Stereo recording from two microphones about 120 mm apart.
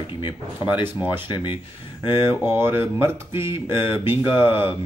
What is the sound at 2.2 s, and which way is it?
Speech, 20° right (ahead or behind).